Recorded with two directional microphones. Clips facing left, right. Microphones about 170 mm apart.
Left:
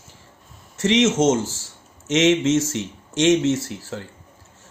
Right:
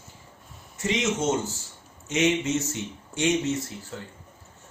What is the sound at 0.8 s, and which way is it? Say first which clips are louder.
Speech: left 9 dB; 90° left.